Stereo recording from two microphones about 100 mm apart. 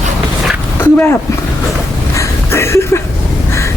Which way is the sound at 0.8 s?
20° left (ahead or behind).